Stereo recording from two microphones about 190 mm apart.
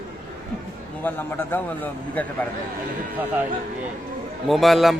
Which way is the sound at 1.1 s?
10° left (ahead or behind).